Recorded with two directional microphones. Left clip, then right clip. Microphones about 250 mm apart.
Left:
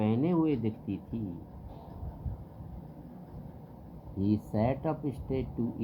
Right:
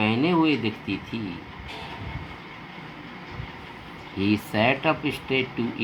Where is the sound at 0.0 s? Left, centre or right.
Centre.